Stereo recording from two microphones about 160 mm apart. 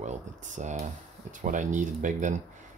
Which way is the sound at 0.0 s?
50° right (ahead or behind).